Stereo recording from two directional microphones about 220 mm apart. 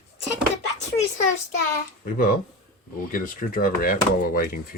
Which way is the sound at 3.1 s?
40° left (ahead or behind).